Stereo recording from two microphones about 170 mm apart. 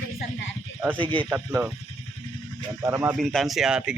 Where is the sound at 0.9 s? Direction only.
30° right (ahead or behind).